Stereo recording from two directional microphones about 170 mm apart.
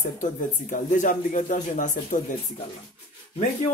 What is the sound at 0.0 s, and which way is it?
Speech, 45° left (ahead or behind).